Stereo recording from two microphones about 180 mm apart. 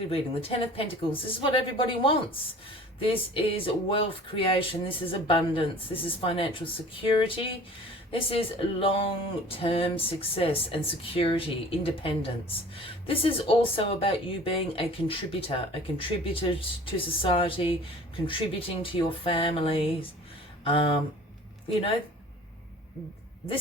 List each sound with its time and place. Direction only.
0.1 s speech: 30° left (ahead or behind)